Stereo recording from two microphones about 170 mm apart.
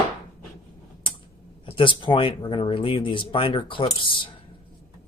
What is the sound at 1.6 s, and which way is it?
Speech, 30° left (ahead or behind).